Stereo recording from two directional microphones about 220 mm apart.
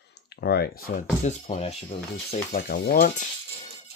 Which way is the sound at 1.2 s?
30° left (ahead or behind).